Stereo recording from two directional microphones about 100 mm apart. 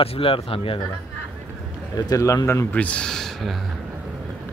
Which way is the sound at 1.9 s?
40° left (ahead or behind).